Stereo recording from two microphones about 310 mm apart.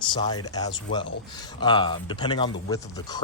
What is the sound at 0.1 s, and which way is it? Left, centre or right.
Speech, centre.